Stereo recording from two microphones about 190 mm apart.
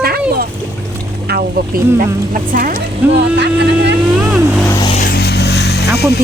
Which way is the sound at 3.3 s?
65° right (ahead or behind).